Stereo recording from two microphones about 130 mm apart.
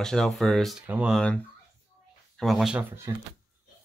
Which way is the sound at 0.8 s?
10° right (ahead or behind).